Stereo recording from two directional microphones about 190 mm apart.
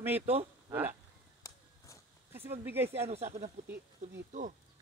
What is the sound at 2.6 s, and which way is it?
Speech, 10° right (ahead or behind).